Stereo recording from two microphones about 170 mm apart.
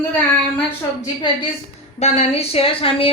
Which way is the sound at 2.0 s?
40° left (ahead or behind).